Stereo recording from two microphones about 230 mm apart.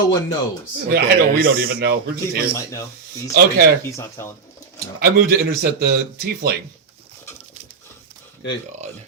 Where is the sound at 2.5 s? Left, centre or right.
Centre.